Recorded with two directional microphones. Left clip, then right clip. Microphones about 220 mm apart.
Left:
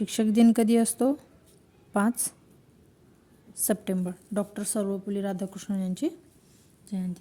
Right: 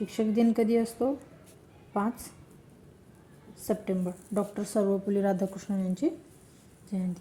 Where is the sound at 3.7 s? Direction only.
50° left (ahead or behind).